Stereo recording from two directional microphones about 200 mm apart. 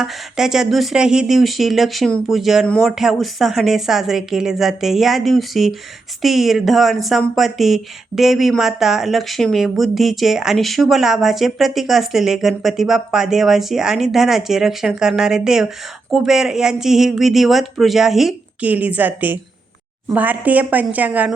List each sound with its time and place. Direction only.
0.0 s a woman's voice: centre (ahead or behind)